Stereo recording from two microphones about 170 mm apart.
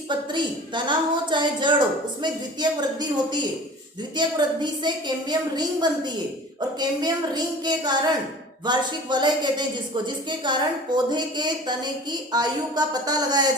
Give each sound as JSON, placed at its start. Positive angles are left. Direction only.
{"t": 0.1, "sound": "a woman's voice", "side_deg": -25}